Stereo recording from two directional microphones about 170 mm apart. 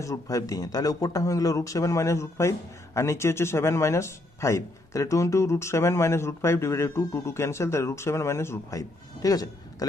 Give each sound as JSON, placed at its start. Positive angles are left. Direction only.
{"t": 0.0, "sound": "speech", "side_deg": 20}